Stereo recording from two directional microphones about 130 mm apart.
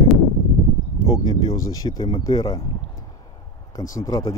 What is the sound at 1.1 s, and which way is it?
Speech, 35° left (ahead or behind).